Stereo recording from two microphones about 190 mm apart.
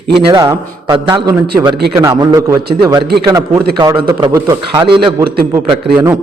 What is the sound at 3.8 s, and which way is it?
A man's voice, 20° right (ahead or behind).